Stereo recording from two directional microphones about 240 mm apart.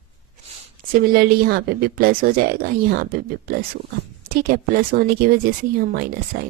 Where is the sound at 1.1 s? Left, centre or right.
Right.